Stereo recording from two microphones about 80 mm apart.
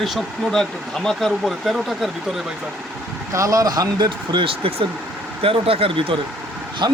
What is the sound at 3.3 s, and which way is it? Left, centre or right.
Speech, right.